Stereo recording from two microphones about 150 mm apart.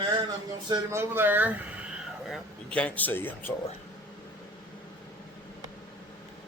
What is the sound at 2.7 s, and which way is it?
Speech, 10° left (ahead or behind).